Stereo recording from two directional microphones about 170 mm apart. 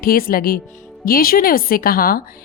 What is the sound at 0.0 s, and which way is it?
A woman's voice, 60° left (ahead or behind).